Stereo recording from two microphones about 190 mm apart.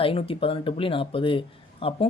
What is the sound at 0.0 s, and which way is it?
Speech, 30° left (ahead or behind).